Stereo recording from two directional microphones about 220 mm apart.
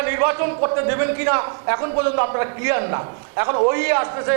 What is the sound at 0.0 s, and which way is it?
A man's voice, 15° right (ahead or behind).